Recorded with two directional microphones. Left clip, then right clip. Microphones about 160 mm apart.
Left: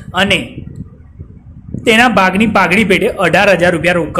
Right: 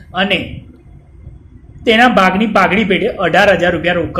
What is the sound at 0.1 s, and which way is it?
Speech, 20° left (ahead or behind).